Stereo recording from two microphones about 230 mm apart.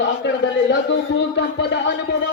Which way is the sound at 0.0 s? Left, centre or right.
Left.